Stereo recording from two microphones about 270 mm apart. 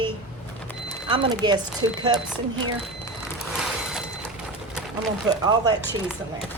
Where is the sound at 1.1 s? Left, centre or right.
Centre.